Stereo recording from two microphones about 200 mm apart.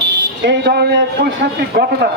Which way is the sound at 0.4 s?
55° right (ahead or behind).